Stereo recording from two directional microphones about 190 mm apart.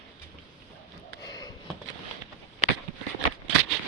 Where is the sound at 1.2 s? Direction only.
20° left (ahead or behind).